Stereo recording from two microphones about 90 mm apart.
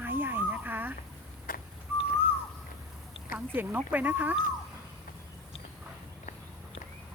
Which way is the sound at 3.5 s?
20° right (ahead or behind).